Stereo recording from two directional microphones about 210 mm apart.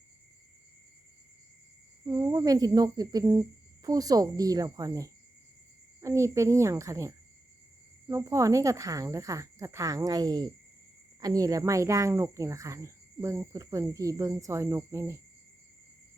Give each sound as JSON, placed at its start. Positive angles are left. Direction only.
{"t": 2.0, "sound": "speech", "side_deg": -20}